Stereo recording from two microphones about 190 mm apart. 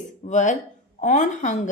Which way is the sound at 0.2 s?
40° left (ahead or behind).